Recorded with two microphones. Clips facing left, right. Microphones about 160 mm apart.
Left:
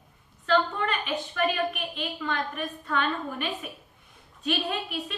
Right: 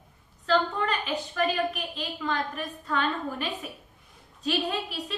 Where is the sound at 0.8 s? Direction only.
30° right (ahead or behind).